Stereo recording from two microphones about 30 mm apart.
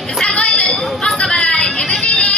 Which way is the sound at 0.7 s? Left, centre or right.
Centre.